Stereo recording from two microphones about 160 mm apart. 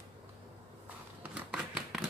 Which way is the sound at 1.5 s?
Centre (ahead or behind).